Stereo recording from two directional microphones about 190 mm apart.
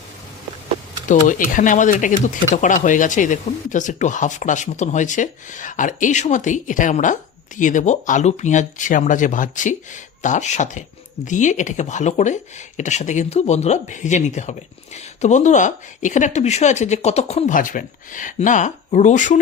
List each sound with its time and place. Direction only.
1.0 s speech: 45° left (ahead or behind)